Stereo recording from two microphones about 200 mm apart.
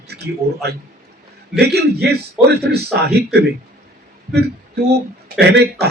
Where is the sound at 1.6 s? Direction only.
55° right (ahead or behind).